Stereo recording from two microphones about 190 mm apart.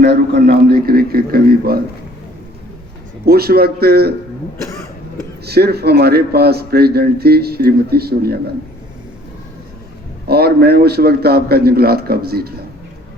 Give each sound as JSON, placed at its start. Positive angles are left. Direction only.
{"t": 0.0, "sound": "a man's voice", "side_deg": -55}
{"t": 3.2, "sound": "a man's voice", "side_deg": -55}
{"t": 5.5, "sound": "a man's voice", "side_deg": -55}
{"t": 10.2, "sound": "a man's voice", "side_deg": -55}